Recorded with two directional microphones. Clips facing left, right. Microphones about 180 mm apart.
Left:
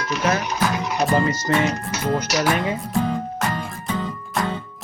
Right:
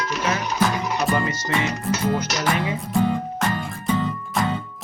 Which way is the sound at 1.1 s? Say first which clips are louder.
Left 4 dB; 40° left (ahead or behind).